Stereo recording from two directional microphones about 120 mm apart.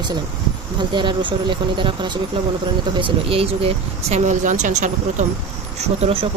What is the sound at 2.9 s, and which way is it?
Speech, 50° right (ahead or behind).